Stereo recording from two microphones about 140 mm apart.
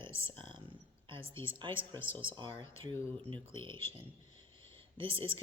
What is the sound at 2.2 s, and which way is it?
Speech, 35° right (ahead or behind).